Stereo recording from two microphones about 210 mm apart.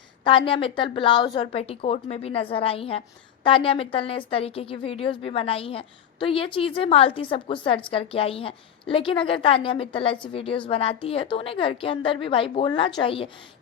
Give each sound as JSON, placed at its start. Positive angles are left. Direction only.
{"t": 0.3, "sound": "a woman's voice", "side_deg": 25}